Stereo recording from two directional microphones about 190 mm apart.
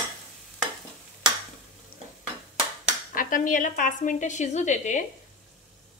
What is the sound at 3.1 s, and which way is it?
A woman's voice, 45° left (ahead or behind).